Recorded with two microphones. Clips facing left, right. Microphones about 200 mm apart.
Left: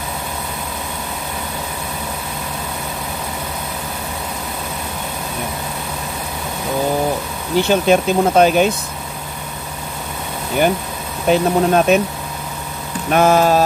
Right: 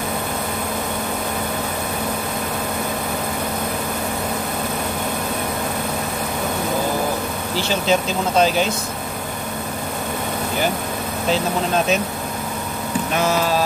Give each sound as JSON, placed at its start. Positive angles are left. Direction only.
{"t": 7.5, "sound": "speech", "side_deg": 55}
{"t": 11.2, "sound": "speech", "side_deg": 60}
{"t": 13.1, "sound": "vehicle", "side_deg": 50}